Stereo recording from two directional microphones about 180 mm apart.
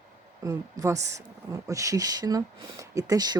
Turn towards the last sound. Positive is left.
turn(degrees=-20)  # may be behind; listen again after turning